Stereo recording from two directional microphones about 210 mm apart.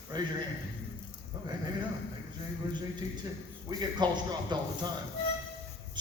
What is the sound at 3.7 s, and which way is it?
A man's voice, 20° right (ahead or behind).